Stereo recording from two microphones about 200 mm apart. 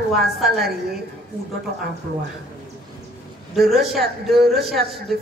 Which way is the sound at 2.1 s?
50° right (ahead or behind).